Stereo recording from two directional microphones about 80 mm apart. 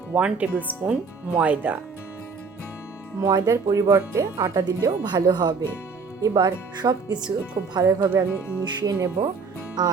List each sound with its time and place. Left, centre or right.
0.1 s speech: centre
3.2 s speech: right
3.5 s speech: right
4.9 s speech: right
6.2 s speech: right
7.9 s speech: right
8.6 s speech: right